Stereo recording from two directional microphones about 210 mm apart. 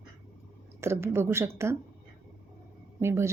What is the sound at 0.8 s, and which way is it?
Speech, 10° right (ahead or behind).